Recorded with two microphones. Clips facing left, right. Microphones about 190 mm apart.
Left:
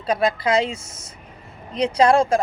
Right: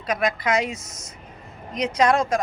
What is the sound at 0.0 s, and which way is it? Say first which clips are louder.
Speech: left 3 dB; 30° left (ahead or behind).